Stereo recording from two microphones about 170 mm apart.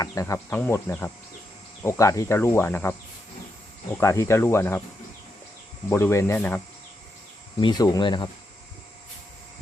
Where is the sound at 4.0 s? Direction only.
15° left (ahead or behind).